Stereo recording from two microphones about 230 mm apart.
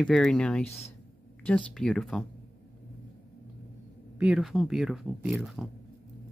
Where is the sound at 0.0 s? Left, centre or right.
Centre.